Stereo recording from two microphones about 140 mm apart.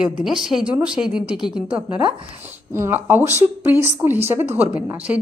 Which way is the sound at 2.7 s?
15° right (ahead or behind).